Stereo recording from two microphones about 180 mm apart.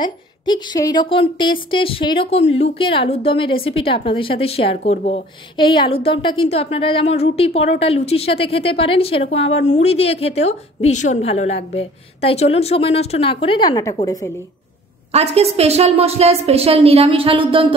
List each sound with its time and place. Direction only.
0.0 s a woman's voice: 25° left (ahead or behind)
15.1 s a woman's voice: 35° right (ahead or behind)